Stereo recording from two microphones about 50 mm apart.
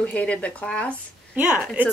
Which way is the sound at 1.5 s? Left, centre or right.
Centre.